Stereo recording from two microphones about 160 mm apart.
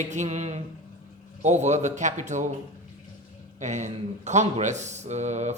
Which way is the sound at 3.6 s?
50° right (ahead or behind).